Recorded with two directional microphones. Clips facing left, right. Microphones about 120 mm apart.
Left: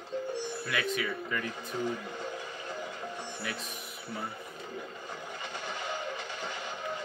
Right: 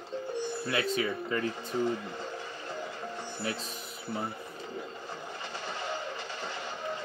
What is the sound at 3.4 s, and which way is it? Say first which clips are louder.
Speech: right 6 dB; 30° right (ahead or behind).